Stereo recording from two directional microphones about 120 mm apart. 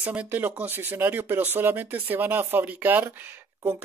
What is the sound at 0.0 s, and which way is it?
Speech, 10° right (ahead or behind).